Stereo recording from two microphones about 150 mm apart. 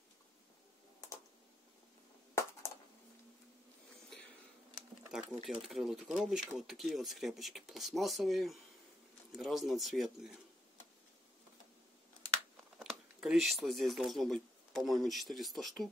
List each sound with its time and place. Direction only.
1.0 s a sound: 25° left (ahead or behind)
5.1 s speech: 5° right (ahead or behind)
12.7 s speech: centre (ahead or behind)